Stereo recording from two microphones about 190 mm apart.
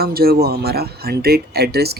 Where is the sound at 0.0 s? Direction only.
55° right (ahead or behind).